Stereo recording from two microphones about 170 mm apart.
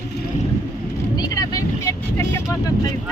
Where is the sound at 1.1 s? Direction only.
25° left (ahead or behind).